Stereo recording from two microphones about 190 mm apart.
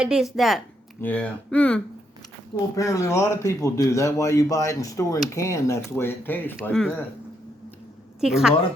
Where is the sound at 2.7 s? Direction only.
15° left (ahead or behind).